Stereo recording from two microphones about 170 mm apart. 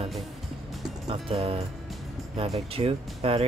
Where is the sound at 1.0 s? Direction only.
35° right (ahead or behind).